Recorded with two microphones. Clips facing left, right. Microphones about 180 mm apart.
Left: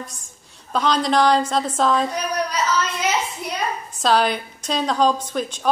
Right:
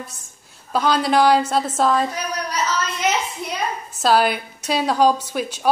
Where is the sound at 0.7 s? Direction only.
5° right (ahead or behind).